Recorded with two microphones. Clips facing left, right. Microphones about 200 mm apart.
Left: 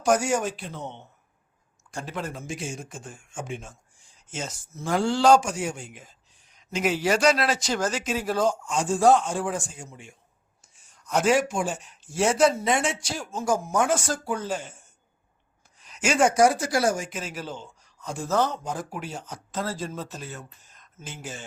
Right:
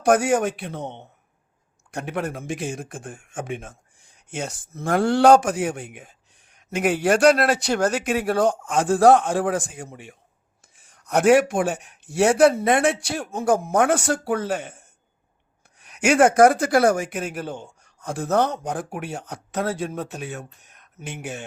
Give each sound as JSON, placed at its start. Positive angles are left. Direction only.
{"t": 0.0, "sound": "speech", "side_deg": -55}
{"t": 1.9, "sound": "speech", "side_deg": -65}